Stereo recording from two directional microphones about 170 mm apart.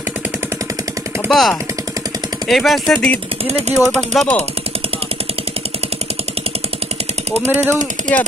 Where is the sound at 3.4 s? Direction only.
40° right (ahead or behind).